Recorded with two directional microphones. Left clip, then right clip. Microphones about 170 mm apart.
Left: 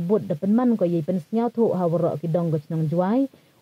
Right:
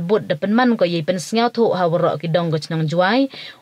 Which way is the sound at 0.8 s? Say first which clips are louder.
Right 5 dB; 5° left (ahead or behind).